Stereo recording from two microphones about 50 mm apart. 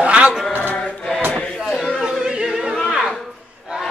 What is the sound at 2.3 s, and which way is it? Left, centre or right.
Choir, centre.